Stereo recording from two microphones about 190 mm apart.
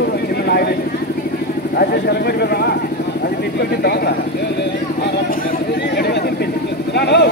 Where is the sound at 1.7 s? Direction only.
55° left (ahead or behind).